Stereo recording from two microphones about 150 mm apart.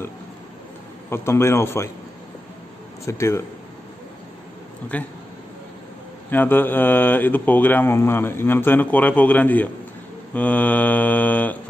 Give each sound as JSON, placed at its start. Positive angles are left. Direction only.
{"t": 1.1, "sound": "speech", "side_deg": 15}
{"t": 3.1, "sound": "speech", "side_deg": 20}
{"t": 6.3, "sound": "speech", "side_deg": 10}